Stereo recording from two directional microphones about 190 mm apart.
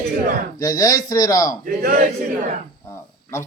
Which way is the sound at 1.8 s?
50° right (ahead or behind).